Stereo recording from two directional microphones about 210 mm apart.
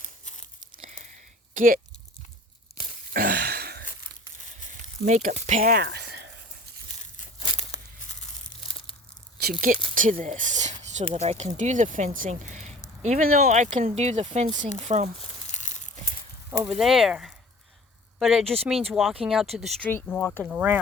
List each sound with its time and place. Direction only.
1.5 s speech: 40° right (ahead or behind)
3.1 s a sound: 45° right (ahead or behind)
5.0 s speech: 35° right (ahead or behind)
5.7 s a sound: 50° right (ahead or behind)
9.4 s speech: 40° right (ahead or behind)
15.4 s crumpling: 35° left (ahead or behind)
16.6 s speech: centre (ahead or behind)
20.5 s speech: 5° right (ahead or behind)